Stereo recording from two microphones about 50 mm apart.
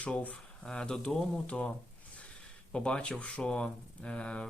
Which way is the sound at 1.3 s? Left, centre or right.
Left.